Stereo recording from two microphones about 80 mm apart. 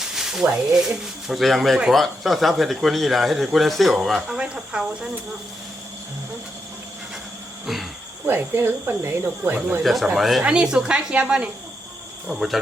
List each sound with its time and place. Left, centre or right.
0.0 s a sound: centre
0.7 s a woman's voice: centre
7.7 s speech: centre
8.3 s speech: right
9.8 s speech: centre
10.4 s a woman's voice: centre